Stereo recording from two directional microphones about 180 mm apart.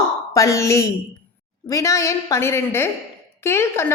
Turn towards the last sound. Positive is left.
turn(degrees=15)  # may be behind; listen again after turning